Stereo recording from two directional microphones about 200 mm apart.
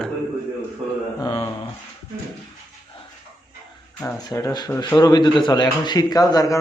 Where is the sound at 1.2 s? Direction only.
20° left (ahead or behind).